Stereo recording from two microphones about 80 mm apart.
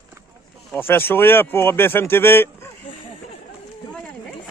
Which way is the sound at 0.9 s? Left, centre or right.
Left.